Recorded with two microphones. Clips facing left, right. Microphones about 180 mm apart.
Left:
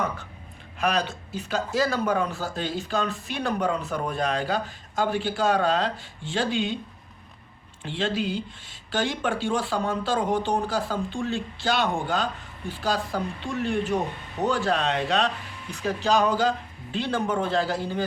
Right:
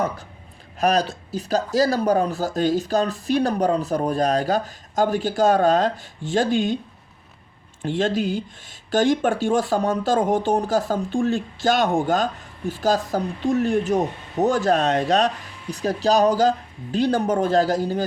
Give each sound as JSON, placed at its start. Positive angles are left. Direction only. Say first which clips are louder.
{"t": 0.8, "sound": "speech", "louder": "right 5 dB", "side_deg": -40}
{"t": 7.8, "sound": "speech", "louder": "right 6 dB", "side_deg": -45}